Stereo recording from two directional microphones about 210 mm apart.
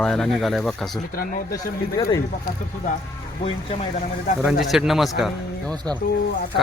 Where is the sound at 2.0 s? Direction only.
15° left (ahead or behind).